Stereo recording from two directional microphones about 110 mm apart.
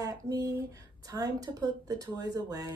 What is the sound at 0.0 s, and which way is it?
Speech, 35° right (ahead or behind).